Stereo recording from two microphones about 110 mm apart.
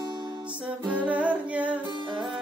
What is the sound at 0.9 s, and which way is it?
Humming, 15° right (ahead or behind).